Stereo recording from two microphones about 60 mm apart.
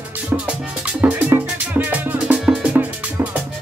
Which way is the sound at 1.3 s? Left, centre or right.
Right.